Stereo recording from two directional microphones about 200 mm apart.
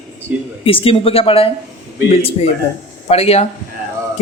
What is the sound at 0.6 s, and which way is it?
A man's voice, 25° left (ahead or behind).